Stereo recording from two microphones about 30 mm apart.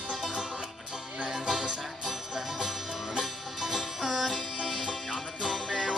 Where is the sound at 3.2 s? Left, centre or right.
Centre.